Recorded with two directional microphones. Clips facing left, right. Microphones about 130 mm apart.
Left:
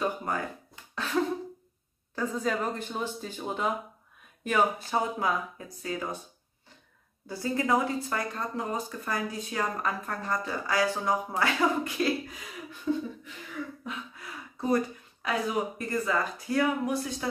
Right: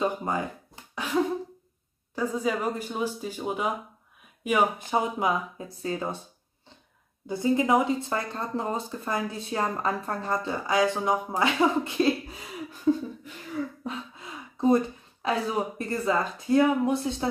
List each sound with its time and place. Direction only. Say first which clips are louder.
0.0 s speech: right 3 dB; 20° right (ahead or behind)
0.9 s cough: right 2 dB; 10° right (ahead or behind)
2.1 s speech: right 2 dB; 10° right (ahead or behind); by 6.0 s 30° right (ahead or behind)
7.2 s speech: right 5 dB; 20° right (ahead or behind)
12.9 s a sound: right 5 dB; 35° right (ahead or behind)
13.8 s speech: right 3 dB; 25° right (ahead or behind)